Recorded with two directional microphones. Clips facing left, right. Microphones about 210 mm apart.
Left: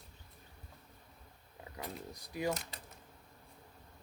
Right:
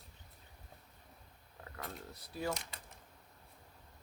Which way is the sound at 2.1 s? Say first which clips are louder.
Left 3 dB; 15° left (ahead or behind).